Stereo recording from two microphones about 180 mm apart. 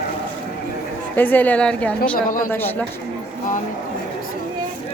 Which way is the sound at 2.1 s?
50° left (ahead or behind).